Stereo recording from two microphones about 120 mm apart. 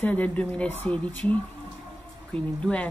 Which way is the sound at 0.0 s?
10° left (ahead or behind).